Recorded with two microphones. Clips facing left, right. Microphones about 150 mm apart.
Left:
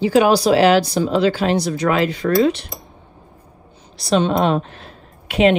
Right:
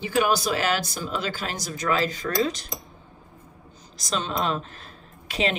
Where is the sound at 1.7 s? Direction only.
40° right (ahead or behind).